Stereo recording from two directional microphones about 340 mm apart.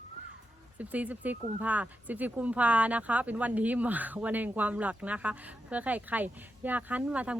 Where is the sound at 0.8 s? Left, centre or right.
Centre.